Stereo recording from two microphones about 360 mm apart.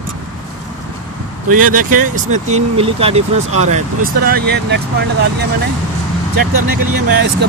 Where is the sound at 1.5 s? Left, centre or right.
Right.